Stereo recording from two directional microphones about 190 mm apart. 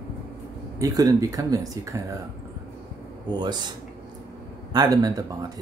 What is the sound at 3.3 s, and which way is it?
Speech, 20° right (ahead or behind).